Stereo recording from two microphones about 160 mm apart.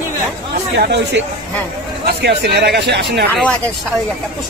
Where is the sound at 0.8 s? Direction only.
90° right.